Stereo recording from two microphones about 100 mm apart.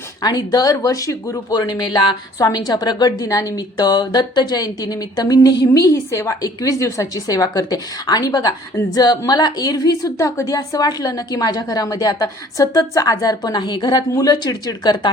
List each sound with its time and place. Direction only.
0.2 s speech: 40° left (ahead or behind)